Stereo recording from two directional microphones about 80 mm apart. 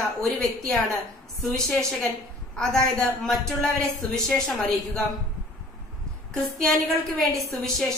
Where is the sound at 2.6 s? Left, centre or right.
Centre.